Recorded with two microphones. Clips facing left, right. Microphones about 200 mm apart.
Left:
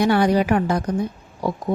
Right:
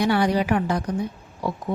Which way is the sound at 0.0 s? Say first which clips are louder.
Left 3 dB; 45° left (ahead or behind).